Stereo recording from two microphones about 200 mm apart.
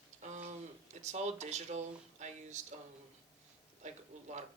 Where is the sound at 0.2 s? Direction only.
35° right (ahead or behind).